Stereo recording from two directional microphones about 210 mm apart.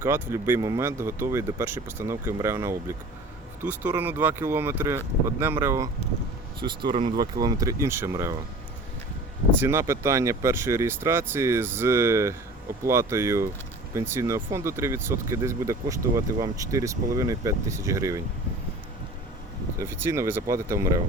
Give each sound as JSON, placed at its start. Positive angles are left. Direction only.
{"t": 0.0, "sound": "speech", "side_deg": -10}
{"t": 9.5, "sound": "speech", "side_deg": -10}
{"t": 19.8, "sound": "speech", "side_deg": -10}